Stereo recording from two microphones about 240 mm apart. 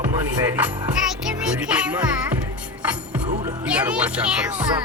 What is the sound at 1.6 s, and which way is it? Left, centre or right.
Music, centre.